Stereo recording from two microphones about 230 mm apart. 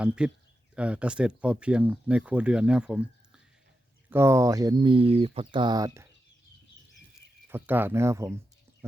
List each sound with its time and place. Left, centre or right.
0.2 s speech: centre
7.4 s speech: centre